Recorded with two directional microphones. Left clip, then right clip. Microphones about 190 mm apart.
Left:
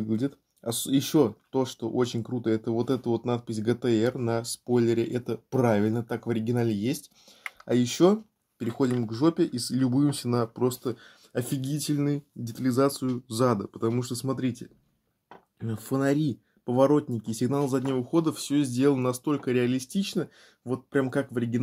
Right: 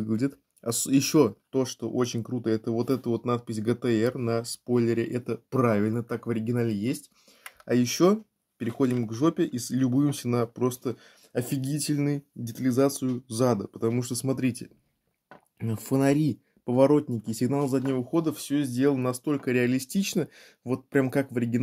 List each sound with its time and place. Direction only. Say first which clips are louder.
0.0 s speech: right 1 dB; 20° right (ahead or behind); by 6.4 s centre (ahead or behind)
7.7 s speech: even; 10° right (ahead or behind)